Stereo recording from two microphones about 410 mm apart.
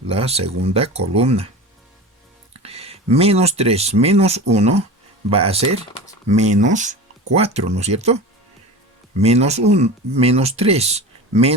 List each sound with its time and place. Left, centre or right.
0.1 s speech: centre
2.5 s speech: centre